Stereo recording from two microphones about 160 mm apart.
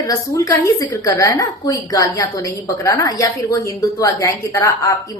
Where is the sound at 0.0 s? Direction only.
20° left (ahead or behind).